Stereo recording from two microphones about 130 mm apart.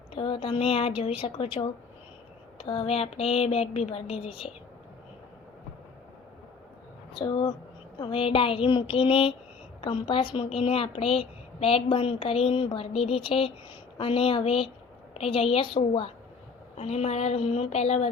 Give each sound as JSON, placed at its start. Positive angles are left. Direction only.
{"t": 0.1, "sound": "a woman's voice", "side_deg": 45}
{"t": 2.6, "sound": "a woman's voice", "side_deg": 45}
{"t": 7.1, "sound": "a woman's voice", "side_deg": 35}